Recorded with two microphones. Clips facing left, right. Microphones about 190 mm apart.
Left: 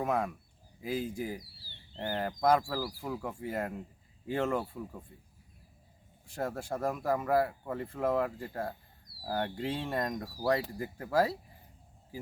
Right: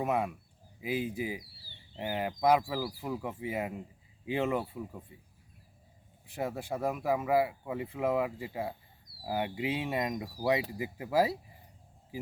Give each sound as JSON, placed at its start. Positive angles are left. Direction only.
{"t": 0.0, "sound": "speech", "side_deg": -10}
{"t": 6.3, "sound": "speech", "side_deg": -5}